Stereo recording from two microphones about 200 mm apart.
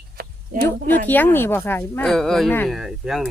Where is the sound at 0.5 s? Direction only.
45° right (ahead or behind).